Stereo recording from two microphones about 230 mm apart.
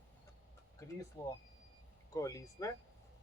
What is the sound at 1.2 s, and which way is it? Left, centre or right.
Speech, centre.